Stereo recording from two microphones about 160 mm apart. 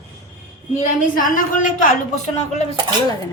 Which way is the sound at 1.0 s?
60° left (ahead or behind).